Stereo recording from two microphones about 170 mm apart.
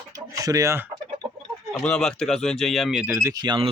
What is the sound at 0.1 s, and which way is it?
Chicken, 20° right (ahead or behind).